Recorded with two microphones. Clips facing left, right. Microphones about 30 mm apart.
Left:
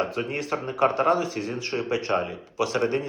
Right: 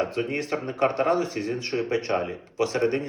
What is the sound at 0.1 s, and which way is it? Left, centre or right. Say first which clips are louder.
Speech: right 1 dB; right.